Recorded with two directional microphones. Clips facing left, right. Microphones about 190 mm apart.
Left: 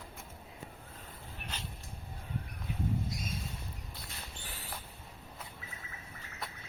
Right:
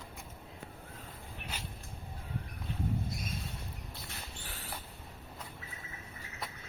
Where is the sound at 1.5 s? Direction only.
10° right (ahead or behind).